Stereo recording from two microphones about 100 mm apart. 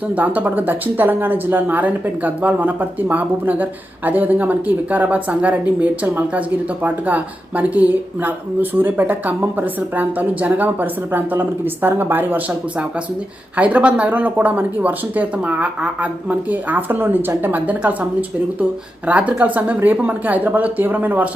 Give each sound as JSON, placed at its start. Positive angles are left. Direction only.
{"t": 0.1, "sound": "speech", "side_deg": -15}
{"t": 13.6, "sound": "speech", "side_deg": -15}